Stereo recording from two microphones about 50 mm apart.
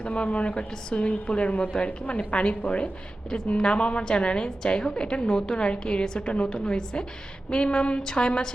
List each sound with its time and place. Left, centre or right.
0.0 s a woman's voice: left